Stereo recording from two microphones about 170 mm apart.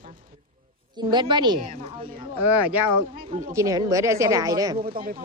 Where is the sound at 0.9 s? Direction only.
25° right (ahead or behind).